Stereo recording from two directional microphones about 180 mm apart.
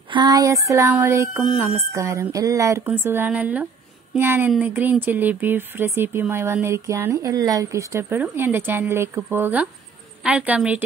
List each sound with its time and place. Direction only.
0.1 s speech: 25° right (ahead or behind)